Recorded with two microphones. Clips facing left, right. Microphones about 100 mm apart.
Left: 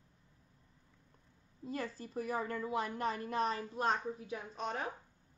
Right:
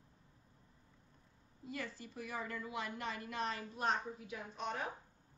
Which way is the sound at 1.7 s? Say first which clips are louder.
Left 5 dB; 40° left (ahead or behind).